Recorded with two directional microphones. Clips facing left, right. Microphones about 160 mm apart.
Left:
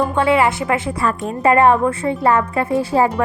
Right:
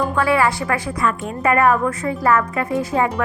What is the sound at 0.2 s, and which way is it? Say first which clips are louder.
A woman's voice: left 2 dB; 25° left (ahead or behind).